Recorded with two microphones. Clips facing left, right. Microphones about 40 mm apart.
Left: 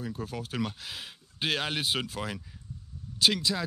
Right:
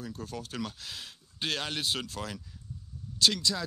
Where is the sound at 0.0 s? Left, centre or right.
Centre.